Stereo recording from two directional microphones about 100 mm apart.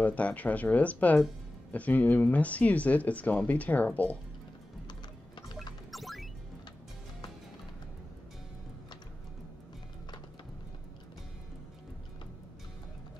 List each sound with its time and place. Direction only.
0.0 s speech: 15° left (ahead or behind)
5.9 s music: centre (ahead or behind)